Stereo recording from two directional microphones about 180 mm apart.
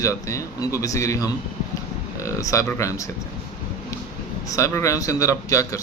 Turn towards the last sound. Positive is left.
turn(degrees=20)  # may be behind; listen again after turning